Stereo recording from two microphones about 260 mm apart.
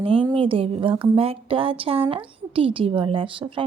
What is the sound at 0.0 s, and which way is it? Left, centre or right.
A woman's voice, centre.